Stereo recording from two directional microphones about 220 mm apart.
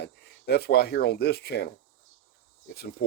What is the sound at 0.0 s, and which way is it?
Speech, 50° left (ahead or behind).